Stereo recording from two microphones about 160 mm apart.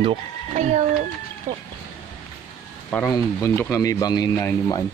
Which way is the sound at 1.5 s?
20° right (ahead or behind).